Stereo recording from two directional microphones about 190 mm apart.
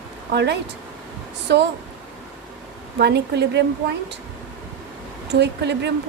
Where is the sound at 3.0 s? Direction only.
60° right (ahead or behind).